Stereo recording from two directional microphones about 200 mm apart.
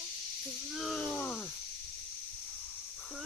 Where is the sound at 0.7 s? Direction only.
Centre (ahead or behind).